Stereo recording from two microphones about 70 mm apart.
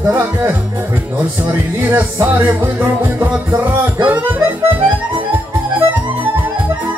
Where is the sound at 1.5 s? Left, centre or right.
Right.